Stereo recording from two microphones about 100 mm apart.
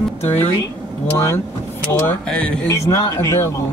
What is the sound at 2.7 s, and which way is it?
Speech, 35° left (ahead or behind).